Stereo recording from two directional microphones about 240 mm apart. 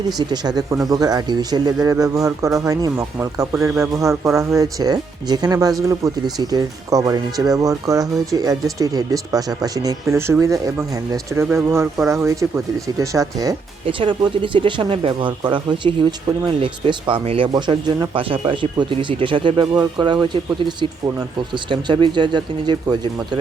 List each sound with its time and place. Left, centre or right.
0.2 s speech: centre